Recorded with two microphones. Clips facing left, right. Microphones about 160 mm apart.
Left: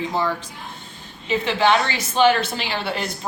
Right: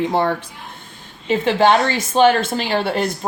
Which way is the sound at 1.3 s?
45° right (ahead or behind).